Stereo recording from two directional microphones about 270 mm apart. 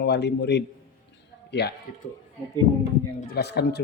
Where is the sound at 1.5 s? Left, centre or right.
Left.